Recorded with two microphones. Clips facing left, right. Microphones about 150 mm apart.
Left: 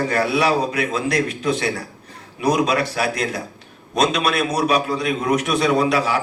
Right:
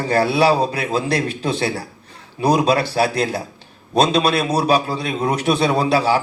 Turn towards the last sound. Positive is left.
turn(degrees=-30)  # may be behind; listen again after turning